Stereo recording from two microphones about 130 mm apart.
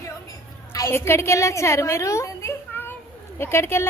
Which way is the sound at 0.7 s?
20° left (ahead or behind).